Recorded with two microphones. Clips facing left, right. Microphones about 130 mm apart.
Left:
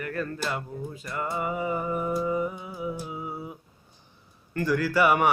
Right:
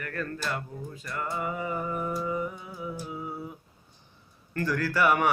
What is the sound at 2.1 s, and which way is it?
Music, 20° left (ahead or behind).